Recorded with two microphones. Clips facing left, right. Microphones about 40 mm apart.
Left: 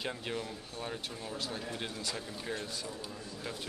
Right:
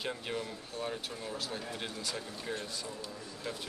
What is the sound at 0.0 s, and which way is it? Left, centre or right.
Speech, centre.